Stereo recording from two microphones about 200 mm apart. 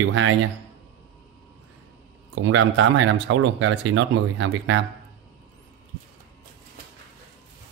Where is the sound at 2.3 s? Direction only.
70° right (ahead or behind).